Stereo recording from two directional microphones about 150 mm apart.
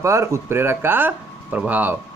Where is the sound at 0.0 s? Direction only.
20° right (ahead or behind).